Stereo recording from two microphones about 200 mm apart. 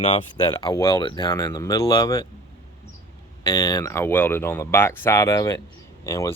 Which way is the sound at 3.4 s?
20° left (ahead or behind).